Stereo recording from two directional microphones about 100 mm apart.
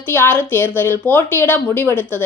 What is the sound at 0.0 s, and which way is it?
A woman's voice, 20° left (ahead or behind).